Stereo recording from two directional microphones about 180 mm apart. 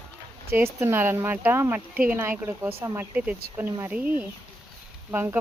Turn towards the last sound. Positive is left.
turn(degrees=-10)  # may be behind; listen again after turning